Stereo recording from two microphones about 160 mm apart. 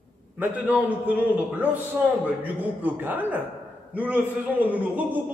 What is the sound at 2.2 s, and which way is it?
A man's voice, 10° right (ahead or behind).